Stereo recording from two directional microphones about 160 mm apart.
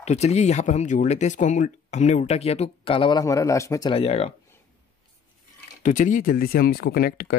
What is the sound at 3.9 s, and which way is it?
Speech, 40° left (ahead or behind).